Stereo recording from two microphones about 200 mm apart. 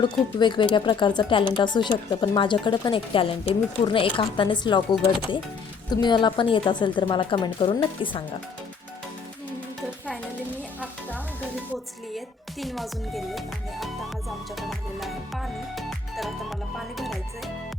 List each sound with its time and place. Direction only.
0.0 s speech: 25° left (ahead or behind)
12.1 s speech: centre (ahead or behind)
14.5 s music: centre (ahead or behind)